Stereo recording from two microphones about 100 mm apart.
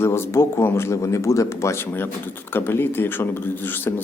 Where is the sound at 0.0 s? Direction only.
25° left (ahead or behind).